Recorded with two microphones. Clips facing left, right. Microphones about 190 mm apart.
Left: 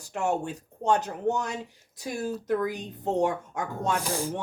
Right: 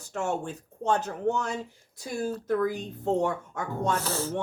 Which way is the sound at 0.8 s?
15° left (ahead or behind).